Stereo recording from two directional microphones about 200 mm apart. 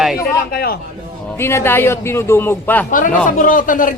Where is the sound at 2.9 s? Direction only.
40° left (ahead or behind).